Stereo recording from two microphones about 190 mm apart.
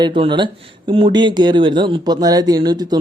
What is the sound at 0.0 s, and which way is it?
Speech, 25° right (ahead or behind).